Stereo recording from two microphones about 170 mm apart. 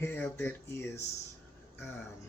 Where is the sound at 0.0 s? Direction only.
15° left (ahead or behind).